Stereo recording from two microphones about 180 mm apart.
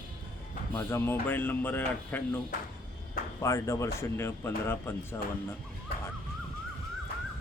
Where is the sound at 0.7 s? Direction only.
15° left (ahead or behind).